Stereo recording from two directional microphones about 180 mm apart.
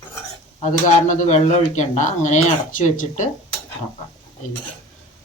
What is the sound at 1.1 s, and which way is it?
Speech, 40° left (ahead or behind).